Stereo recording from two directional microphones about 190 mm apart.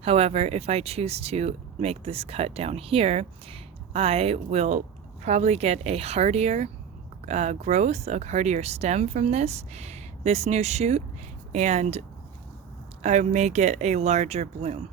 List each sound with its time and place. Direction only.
0.0 s speech: 30° right (ahead or behind)